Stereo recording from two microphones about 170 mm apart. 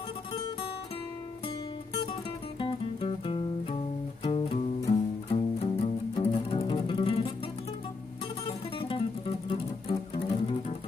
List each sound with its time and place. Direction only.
2.6 s music: 30° left (ahead or behind)
8.5 s music: 30° left (ahead or behind)